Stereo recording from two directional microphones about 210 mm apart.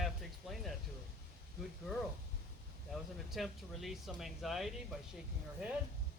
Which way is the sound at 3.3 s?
Centre (ahead or behind).